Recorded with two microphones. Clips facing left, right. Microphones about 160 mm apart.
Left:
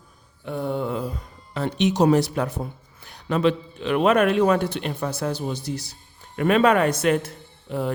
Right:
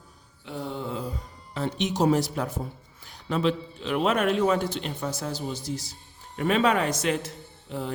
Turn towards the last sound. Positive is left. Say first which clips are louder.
# left 6 dB
turn(degrees=60)  # may be behind; listen again after turning